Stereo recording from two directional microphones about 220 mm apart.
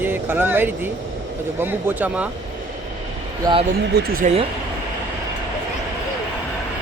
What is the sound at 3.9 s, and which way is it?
Speech, 45° right (ahead or behind).